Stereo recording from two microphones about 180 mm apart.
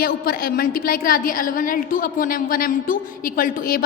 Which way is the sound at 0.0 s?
55° left (ahead or behind).